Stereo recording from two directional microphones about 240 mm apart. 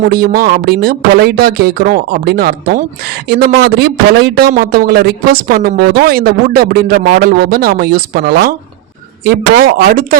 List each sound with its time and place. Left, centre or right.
0.0 s speech: right